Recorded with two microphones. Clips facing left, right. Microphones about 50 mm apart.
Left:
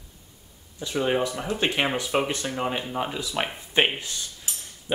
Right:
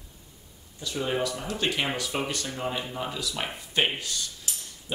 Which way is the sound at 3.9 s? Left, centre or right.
Left.